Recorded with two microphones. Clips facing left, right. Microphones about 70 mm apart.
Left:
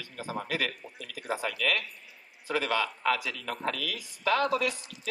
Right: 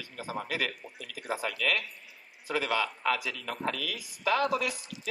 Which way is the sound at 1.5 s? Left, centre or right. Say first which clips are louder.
Even; right.